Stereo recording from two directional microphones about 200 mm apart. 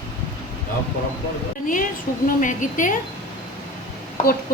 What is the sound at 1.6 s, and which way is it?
A woman's voice, 40° left (ahead or behind).